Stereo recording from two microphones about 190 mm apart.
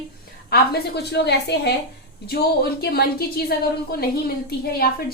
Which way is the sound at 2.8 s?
55° left (ahead or behind).